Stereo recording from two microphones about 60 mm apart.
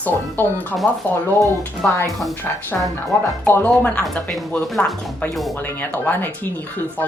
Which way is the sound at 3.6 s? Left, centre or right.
Left.